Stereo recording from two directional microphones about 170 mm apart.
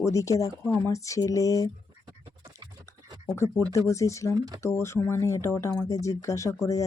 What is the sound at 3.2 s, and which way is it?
Speech, 15° left (ahead or behind).